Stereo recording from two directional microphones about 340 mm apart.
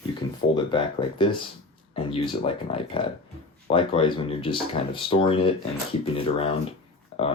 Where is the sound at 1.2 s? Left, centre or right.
Centre.